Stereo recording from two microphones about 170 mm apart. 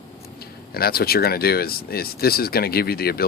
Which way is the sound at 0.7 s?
65° left (ahead or behind).